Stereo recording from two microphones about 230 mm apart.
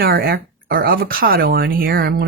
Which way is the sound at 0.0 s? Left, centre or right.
Right.